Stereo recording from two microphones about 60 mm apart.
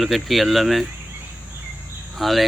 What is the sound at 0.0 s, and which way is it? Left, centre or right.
Speech, centre.